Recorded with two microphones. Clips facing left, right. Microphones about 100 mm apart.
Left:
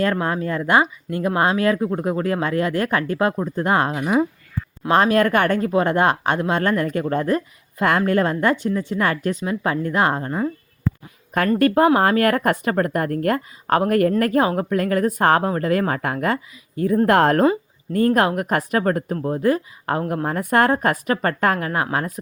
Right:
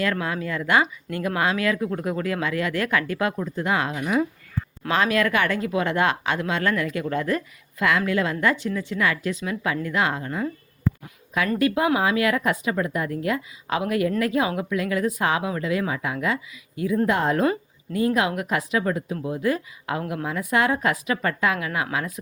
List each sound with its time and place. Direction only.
0.0 s speech: 35° left (ahead or behind)
4.9 s speech: 40° left (ahead or behind)
11.3 s speech: 45° left (ahead or behind)
17.1 s a woman's voice: 65° left (ahead or behind)
17.9 s speech: 50° left (ahead or behind)